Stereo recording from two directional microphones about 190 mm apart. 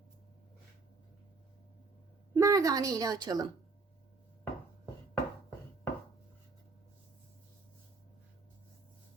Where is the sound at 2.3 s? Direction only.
15° right (ahead or behind).